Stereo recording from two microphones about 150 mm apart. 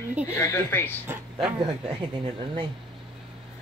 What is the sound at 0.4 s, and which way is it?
Speech, 15° left (ahead or behind).